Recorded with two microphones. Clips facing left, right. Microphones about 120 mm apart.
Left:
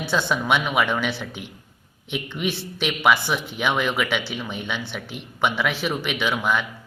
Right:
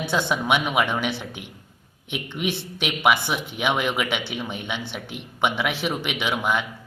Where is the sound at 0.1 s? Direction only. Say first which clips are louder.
Left 1 dB; 20° right (ahead or behind).